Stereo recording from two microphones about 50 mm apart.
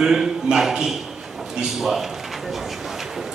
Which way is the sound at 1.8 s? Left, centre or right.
Centre.